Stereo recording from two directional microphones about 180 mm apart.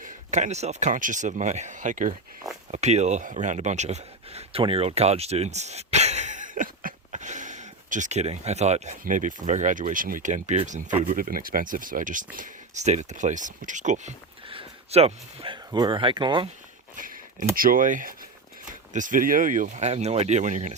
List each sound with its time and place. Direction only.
0.0 s speech: 40° right (ahead or behind)
14.4 s speech: 30° right (ahead or behind)
17.0 s speech: 50° right (ahead or behind)